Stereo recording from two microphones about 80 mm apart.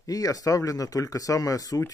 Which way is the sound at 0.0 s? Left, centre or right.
Left.